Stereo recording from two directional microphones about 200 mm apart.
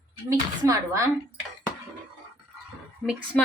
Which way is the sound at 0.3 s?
15° right (ahead or behind).